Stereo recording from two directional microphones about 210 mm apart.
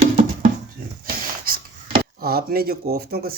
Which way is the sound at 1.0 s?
45° right (ahead or behind).